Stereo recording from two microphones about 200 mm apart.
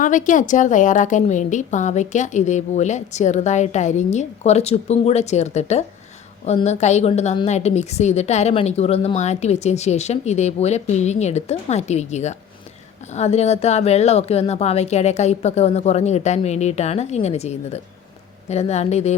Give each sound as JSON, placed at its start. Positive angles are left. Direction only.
{"t": 0.0, "sound": "a woman's voice", "side_deg": 40}